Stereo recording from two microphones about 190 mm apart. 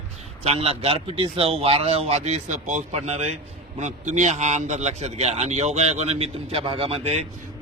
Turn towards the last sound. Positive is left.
turn(degrees=-30)  # may be behind; listen again after turning